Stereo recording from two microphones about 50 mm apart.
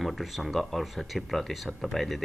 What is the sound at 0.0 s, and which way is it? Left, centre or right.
Speech, centre.